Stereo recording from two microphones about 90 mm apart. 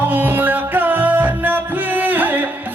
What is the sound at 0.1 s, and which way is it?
Music, 20° right (ahead or behind).